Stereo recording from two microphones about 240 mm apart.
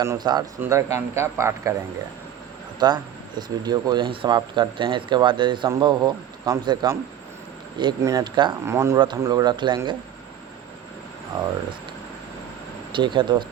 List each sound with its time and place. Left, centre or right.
0.0 s speech: centre
2.7 s speech: centre
12.9 s speech: centre